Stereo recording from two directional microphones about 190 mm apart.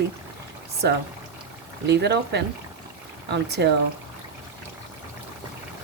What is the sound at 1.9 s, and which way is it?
Speech, 60° right (ahead or behind).